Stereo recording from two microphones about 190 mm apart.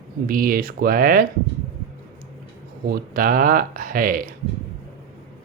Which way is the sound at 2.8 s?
50° right (ahead or behind).